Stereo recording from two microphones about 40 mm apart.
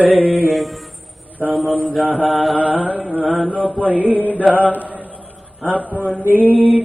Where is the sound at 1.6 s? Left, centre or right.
Right.